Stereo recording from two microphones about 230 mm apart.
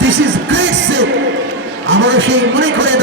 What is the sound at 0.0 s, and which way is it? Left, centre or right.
Music, right.